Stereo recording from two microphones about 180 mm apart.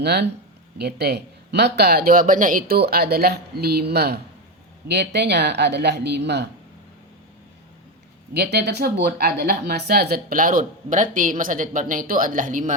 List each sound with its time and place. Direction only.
0.0 s speech: 65° right (ahead or behind)
8.3 s speech: 65° right (ahead or behind); by 12.7 s 45° right (ahead or behind)